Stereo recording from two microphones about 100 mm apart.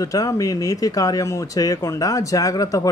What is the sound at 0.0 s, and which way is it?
Speech, 35° left (ahead or behind).